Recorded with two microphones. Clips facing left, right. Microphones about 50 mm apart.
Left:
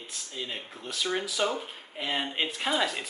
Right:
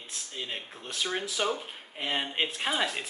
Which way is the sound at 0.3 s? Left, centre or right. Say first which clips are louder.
Left 1 dB; centre.